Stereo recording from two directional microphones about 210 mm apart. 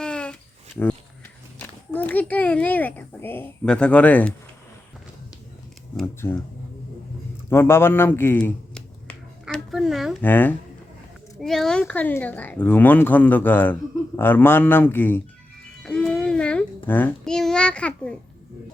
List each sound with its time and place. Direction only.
0.0 s babbling: 5° left (ahead or behind)
1.5 s a sound: 10° left (ahead or behind)
2.3 s speech: 5° left (ahead or behind)
6.0 s speech: 10° left (ahead or behind)
7.5 s finger snapping: 10° left (ahead or behind)
11.3 s speech: centre (ahead or behind)
15.8 s babbling: 5° left (ahead or behind)